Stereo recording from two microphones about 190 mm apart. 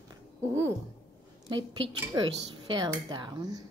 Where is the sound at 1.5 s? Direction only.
25° right (ahead or behind).